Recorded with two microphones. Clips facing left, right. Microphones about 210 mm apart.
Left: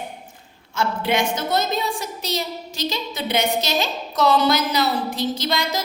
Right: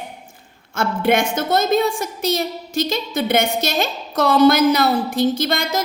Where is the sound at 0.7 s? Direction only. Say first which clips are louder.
Right 4 dB; 50° right (ahead or behind).